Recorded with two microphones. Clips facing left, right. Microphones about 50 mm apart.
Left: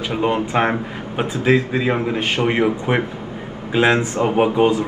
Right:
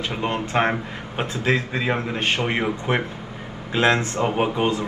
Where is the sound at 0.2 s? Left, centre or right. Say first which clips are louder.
Left 4 dB; centre.